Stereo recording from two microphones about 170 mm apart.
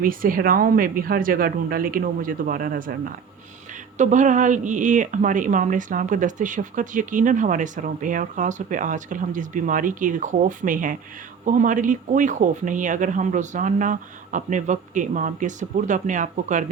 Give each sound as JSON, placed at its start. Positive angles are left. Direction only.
{"t": 0.0, "sound": "speech", "side_deg": -55}
{"t": 3.9, "sound": "speech", "side_deg": -45}